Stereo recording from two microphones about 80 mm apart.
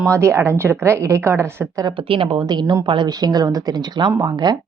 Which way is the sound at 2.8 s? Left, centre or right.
Right.